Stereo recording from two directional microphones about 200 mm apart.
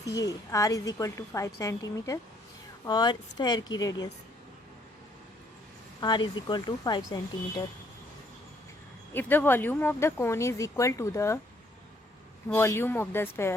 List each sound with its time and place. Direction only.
0.0 s speech: 15° left (ahead or behind)
6.0 s speech: 20° left (ahead or behind)
9.1 s speech: 10° left (ahead or behind)
12.5 s speech: 10° left (ahead or behind)